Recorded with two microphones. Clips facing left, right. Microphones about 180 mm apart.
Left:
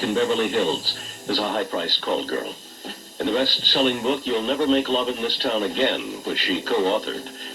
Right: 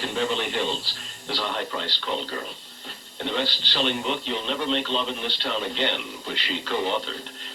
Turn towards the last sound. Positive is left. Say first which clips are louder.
# left 5 dB
turn(degrees=40)  # may be behind; listen again after turning